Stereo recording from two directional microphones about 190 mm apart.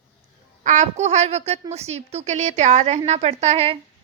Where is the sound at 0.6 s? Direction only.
40° right (ahead or behind).